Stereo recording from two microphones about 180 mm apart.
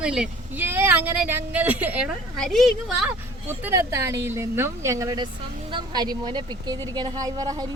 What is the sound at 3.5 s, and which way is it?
A woman's voice, 15° right (ahead or behind).